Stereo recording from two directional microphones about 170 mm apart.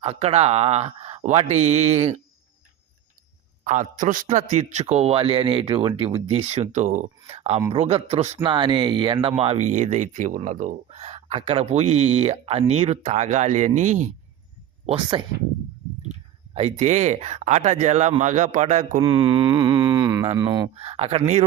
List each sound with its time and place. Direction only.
0.0 s speech: 40° right (ahead or behind)
3.6 s speech: 45° right (ahead or behind)
8.4 s mantra: 30° right (ahead or behind)
9.4 s speech: 40° right (ahead or behind)
14.8 s mantra: 30° right (ahead or behind)
16.6 s a man's voice: 40° right (ahead or behind)
18.9 s mantra: 30° right (ahead or behind)
20.3 s speech: 25° right (ahead or behind)